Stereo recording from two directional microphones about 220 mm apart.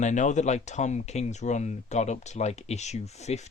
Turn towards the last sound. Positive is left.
turn(degrees=30)  # may be behind; listen again after turning